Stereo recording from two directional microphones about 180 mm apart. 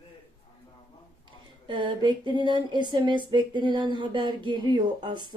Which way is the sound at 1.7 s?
25° right (ahead or behind).